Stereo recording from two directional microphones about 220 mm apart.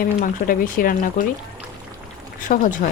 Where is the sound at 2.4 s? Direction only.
35° left (ahead or behind).